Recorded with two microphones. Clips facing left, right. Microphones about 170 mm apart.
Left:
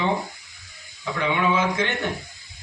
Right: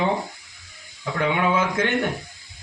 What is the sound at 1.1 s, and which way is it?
Speech, 50° right (ahead or behind).